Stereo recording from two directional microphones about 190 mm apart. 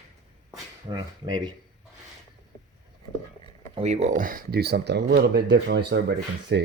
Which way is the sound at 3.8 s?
35° right (ahead or behind).